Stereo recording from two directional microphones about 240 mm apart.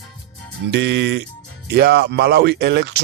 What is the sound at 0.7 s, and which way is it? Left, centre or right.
Speech, right.